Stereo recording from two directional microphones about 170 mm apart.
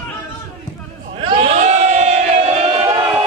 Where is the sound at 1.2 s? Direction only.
30° right (ahead or behind).